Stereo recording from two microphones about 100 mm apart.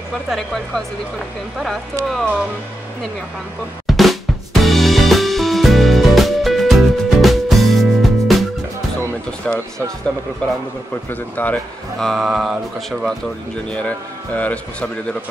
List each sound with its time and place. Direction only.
0.3 s speech: 5° left (ahead or behind)
3.8 s drum kit: centre (ahead or behind)
9.5 s a man's voice: 10° left (ahead or behind)
11.1 s a man's voice: 15° left (ahead or behind)
12.0 s speech: centre (ahead or behind)
13.7 s a man's voice: 10° left (ahead or behind)